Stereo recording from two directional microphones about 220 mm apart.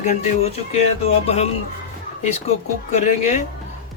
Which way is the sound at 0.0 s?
30° left (ahead or behind).